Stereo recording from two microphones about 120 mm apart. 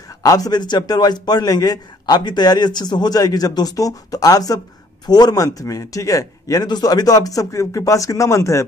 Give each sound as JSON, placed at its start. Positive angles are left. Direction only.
{"t": 0.2, "sound": "a man's voice", "side_deg": 30}